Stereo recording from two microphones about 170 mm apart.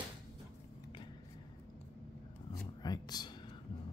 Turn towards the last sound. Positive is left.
turn(degrees=25)  # may be behind; listen again after turning